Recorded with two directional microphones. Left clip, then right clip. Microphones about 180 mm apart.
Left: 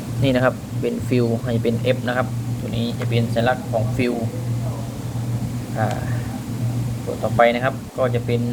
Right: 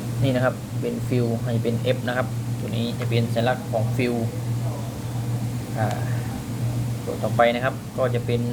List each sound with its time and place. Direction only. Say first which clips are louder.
0.2 s a man's voice: left 4 dB; 15° left (ahead or behind); by 4.1 s centre (ahead or behind)
7.3 s a man's voice: left 3 dB; centre (ahead or behind)